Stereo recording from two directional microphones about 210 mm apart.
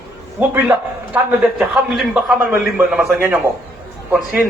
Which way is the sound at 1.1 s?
5° right (ahead or behind).